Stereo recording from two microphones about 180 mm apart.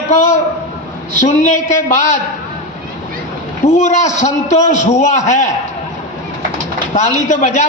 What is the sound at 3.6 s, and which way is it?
A man's voice, 40° left (ahead or behind).